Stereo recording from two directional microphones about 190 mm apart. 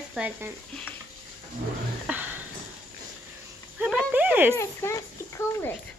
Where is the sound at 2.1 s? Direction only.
5° right (ahead or behind).